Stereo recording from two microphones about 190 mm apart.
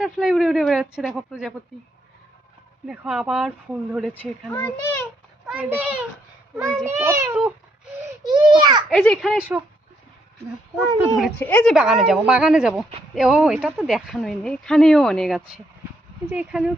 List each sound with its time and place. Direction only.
0.0 s speech: centre (ahead or behind)
2.8 s speech: 5° right (ahead or behind)
4.2 s a child's voice: 10° left (ahead or behind)
5.5 s a child's voice: 10° right (ahead or behind)
8.2 s a child's voice: 25° right (ahead or behind)
8.9 s speech: centre (ahead or behind)
11.3 s speech: 10° left (ahead or behind)